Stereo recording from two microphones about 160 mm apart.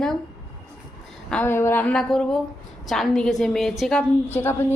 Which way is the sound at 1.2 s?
10° left (ahead or behind).